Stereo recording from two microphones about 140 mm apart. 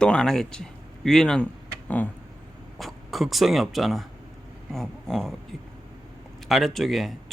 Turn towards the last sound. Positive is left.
turn(degrees=0)  # may be behind; listen again after turning